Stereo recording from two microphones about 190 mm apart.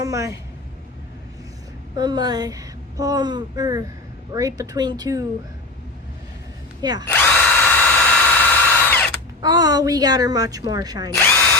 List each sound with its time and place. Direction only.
0.0 s a woman's voice: 15° right (ahead or behind)
2.0 s speech: 20° right (ahead or behind)
7.1 s drill: 10° left (ahead or behind)
9.4 s speech: 20° right (ahead or behind)
11.1 s drill: 10° left (ahead or behind)